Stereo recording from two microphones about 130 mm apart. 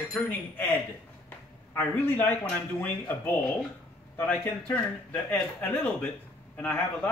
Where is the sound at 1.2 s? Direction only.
15° left (ahead or behind).